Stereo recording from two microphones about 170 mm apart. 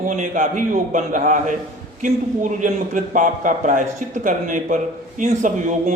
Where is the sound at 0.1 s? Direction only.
50° right (ahead or behind).